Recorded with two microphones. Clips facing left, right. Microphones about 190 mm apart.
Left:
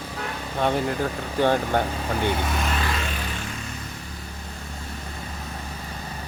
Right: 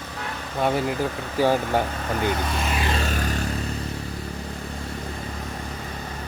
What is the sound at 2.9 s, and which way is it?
Vehicle, 40° right (ahead or behind).